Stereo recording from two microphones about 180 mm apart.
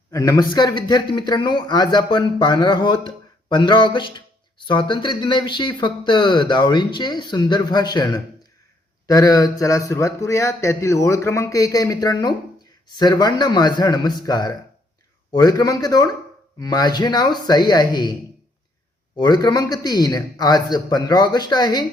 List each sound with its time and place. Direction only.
0.1 s speech: 20° left (ahead or behind)